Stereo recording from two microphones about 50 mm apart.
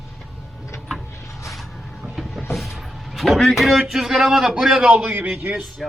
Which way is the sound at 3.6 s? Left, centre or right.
Centre.